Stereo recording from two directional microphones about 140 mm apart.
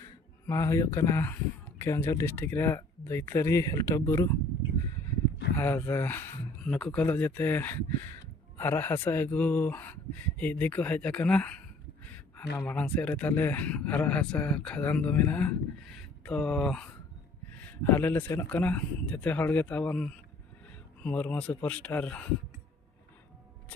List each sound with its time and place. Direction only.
0.5 s speech: 20° left (ahead or behind)
5.6 s speech: 15° left (ahead or behind)